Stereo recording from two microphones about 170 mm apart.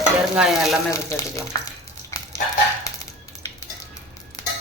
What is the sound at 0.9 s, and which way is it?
Speech, 20° left (ahead or behind).